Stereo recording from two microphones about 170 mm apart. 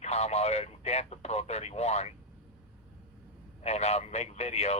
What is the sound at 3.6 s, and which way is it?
Speech, 40° left (ahead or behind).